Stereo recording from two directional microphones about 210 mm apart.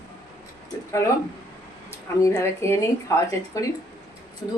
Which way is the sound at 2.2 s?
15° left (ahead or behind).